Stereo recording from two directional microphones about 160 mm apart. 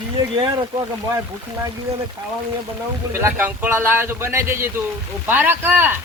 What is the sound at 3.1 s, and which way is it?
Speech, 15° right (ahead or behind).